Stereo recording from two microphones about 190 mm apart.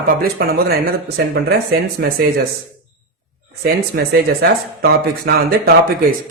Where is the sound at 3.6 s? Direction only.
55° right (ahead or behind).